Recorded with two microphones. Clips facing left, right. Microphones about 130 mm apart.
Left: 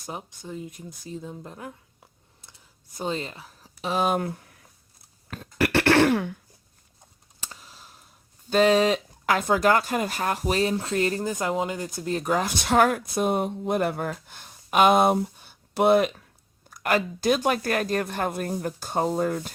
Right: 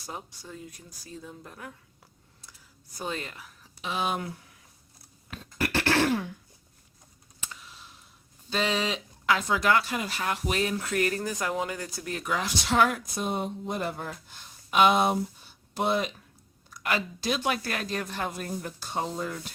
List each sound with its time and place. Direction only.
0.1 s speech: 20° left (ahead or behind); by 4.4 s 45° left (ahead or behind)
5.5 s throat clearing: 70° left (ahead or behind)
7.4 s a sound: 40° left (ahead or behind)
8.4 s speech: 45° left (ahead or behind); by 12.2 s 25° left (ahead or behind)
12.2 s speech: 45° left (ahead or behind); by 16.1 s 60° left (ahead or behind)
16.6 s speech: 50° left (ahead or behind)